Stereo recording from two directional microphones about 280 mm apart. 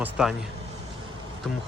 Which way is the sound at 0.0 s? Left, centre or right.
Centre.